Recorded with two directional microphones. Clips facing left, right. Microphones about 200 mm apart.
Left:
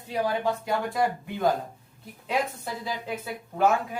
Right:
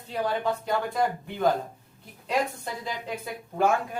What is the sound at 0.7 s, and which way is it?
Speech, 5° left (ahead or behind).